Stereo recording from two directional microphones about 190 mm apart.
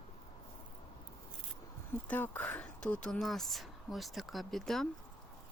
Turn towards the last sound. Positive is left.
turn(degrees=0)  # may be behind; listen again after turning